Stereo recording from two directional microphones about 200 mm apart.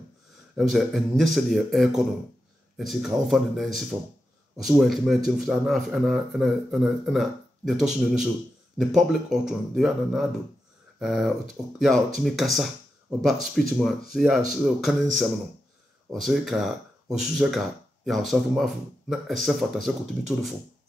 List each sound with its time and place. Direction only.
0.6 s speech: centre (ahead or behind)